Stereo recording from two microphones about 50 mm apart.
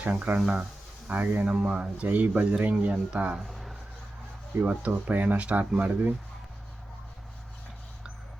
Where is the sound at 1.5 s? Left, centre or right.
Right.